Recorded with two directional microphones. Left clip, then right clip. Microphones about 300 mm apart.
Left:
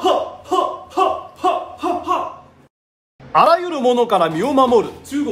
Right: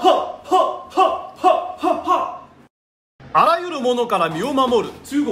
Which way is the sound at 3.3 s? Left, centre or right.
Centre.